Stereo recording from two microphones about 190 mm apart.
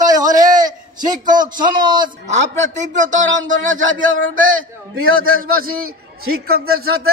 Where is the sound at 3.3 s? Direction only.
80° right.